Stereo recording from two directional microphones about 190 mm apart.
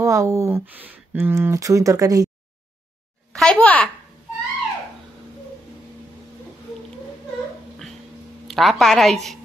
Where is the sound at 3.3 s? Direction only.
5° left (ahead or behind).